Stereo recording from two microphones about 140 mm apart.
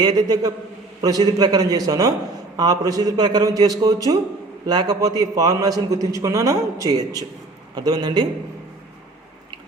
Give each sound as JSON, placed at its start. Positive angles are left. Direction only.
{"t": 0.0, "sound": "a man's voice", "side_deg": -30}